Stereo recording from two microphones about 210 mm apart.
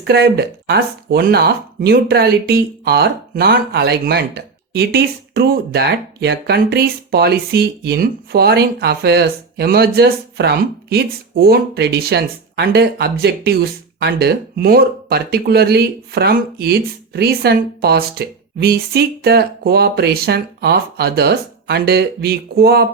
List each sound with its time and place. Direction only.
0.0 s speech: 50° right (ahead or behind)